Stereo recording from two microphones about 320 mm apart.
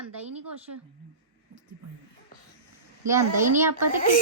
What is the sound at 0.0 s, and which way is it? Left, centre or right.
Speech, right.